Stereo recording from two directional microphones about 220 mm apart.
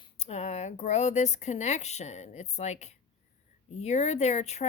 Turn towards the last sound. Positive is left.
turn(degrees=30)  # may be behind; listen again after turning